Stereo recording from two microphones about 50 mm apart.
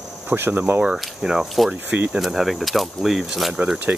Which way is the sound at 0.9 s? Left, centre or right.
Centre.